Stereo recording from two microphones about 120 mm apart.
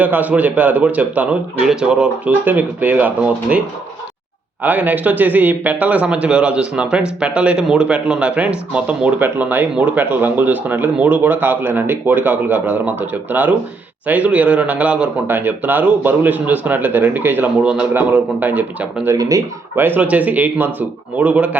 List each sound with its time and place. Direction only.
0.0 s speech: 15° right (ahead or behind)
4.6 s speech: 15° right (ahead or behind)
19.1 s speech: 30° right (ahead or behind)
19.7 s speech: 15° right (ahead or behind)